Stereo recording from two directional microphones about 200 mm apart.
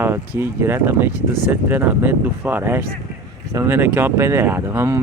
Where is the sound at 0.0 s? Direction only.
10° right (ahead or behind).